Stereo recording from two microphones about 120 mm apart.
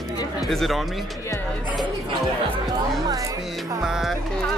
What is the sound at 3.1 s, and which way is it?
Music, 25° right (ahead or behind).